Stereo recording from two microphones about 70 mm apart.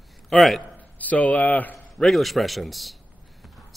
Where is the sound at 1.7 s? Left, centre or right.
Centre.